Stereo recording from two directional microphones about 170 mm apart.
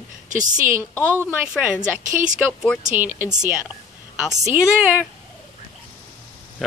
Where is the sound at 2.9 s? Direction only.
10° right (ahead or behind).